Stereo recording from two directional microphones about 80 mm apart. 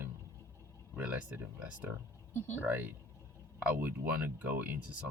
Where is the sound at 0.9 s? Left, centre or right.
Right.